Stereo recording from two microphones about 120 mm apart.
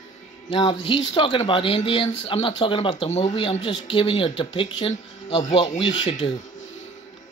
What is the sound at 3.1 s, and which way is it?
Speech, 70° left (ahead or behind).